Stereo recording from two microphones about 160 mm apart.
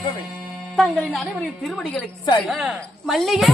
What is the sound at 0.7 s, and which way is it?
A woman's voice, centre (ahead or behind).